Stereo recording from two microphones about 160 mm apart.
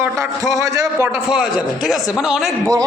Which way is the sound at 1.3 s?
5° right (ahead or behind).